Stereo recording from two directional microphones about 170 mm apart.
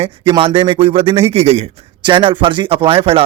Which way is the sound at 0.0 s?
30° right (ahead or behind).